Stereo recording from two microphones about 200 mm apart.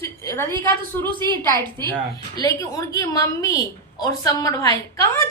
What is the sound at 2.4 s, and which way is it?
A woman's voice, 15° left (ahead or behind).